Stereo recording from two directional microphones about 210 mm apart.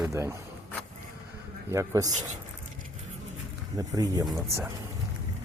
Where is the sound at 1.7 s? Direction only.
15° right (ahead or behind).